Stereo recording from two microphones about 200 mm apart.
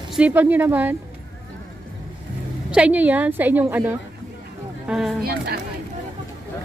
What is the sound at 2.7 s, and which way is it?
A woman's voice, 5° right (ahead or behind).